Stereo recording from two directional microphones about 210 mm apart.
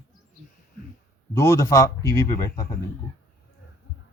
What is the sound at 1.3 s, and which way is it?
A man's voice, 15° left (ahead or behind).